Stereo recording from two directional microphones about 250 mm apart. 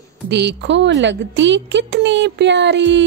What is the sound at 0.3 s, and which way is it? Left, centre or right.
A woman's voice, right.